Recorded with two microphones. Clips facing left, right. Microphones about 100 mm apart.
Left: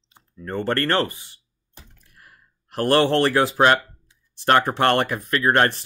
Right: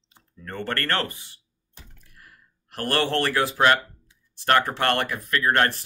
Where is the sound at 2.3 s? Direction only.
25° left (ahead or behind).